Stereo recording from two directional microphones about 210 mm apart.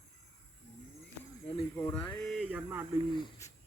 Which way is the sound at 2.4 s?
5° right (ahead or behind).